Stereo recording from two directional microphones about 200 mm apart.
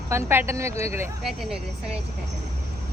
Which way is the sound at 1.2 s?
Centre (ahead or behind).